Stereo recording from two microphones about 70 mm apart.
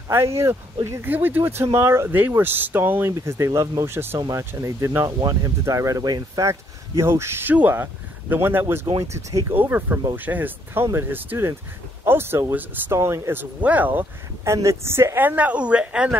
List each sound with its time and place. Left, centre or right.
0.1 s speech: right
1.0 s speech: right
2.0 s speech: right
3.1 s speech: right
4.3 s speech: right
6.4 s speech: right
9.0 s speech: right
9.5 s speech: right
12.9 s speech: right
13.6 s speech: right
14.4 s speech: right; by 16.2 s centre